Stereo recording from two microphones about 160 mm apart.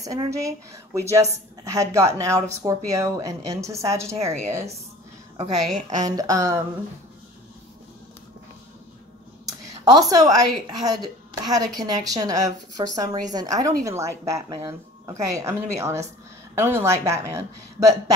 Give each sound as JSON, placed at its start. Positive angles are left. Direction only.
{"t": 0.0, "sound": "a woman's voice", "side_deg": -20}
{"t": 5.4, "sound": "a woman's voice", "side_deg": -50}
{"t": 6.0, "sound": "speech", "side_deg": -25}
{"t": 10.0, "sound": "a woman's voice", "side_deg": -20}